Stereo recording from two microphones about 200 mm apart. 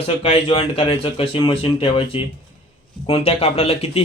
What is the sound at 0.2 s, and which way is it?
Speech, 30° left (ahead or behind).